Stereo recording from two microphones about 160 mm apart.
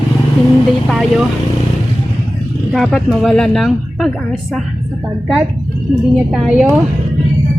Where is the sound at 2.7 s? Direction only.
Centre (ahead or behind).